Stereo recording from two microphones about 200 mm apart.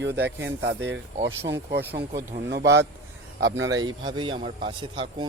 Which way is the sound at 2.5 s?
60° right (ahead or behind).